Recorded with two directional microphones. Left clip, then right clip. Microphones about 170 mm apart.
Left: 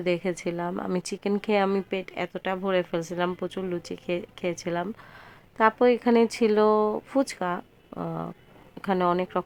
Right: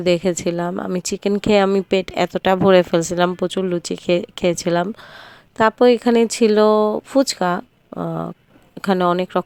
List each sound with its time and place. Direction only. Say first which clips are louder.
0.0 s speech: right 9 dB; 35° right (ahead or behind)